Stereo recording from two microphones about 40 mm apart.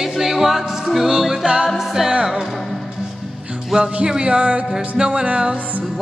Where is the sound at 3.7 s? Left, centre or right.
Centre.